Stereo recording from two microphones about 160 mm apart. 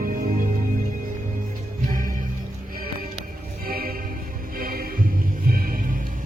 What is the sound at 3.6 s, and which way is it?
Music, 65° right (ahead or behind).